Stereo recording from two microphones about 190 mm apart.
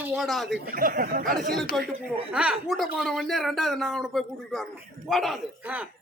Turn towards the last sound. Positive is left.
turn(degrees=0)  # may be behind; listen again after turning